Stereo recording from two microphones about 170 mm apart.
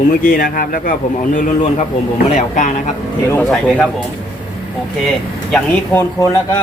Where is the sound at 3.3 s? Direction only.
5° left (ahead or behind).